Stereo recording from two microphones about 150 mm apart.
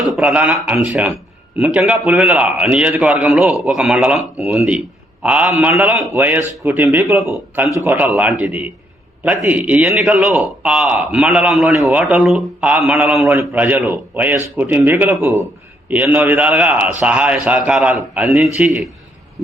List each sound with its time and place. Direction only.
0.0 s a man's voice: 5° right (ahead or behind)